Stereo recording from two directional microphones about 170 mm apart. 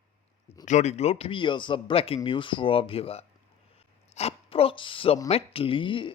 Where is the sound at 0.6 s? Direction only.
45° left (ahead or behind).